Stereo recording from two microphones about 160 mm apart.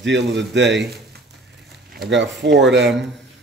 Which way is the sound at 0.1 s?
90° right.